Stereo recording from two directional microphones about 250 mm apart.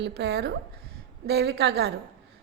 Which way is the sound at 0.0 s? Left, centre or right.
Right.